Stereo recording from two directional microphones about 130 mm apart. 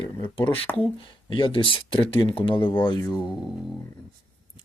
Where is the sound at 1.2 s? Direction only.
40° left (ahead or behind).